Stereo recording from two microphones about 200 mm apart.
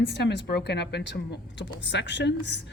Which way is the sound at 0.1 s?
55° left (ahead or behind).